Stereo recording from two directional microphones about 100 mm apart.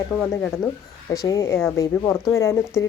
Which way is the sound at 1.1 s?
35° left (ahead or behind).